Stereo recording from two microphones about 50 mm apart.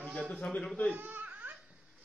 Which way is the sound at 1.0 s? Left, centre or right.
Right.